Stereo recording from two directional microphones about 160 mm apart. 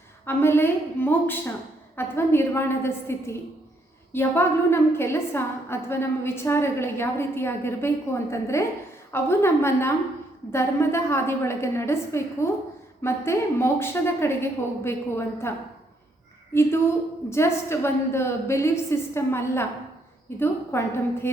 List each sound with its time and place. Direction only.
0.3 s a woman's voice: 15° left (ahead or behind)
16.6 s a woman's voice: 15° left (ahead or behind)